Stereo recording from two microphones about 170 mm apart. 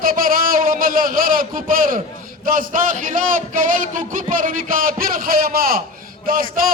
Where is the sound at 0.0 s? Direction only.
55° right (ahead or behind).